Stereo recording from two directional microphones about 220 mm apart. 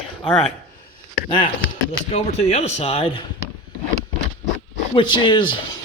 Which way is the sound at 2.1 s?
30° left (ahead or behind).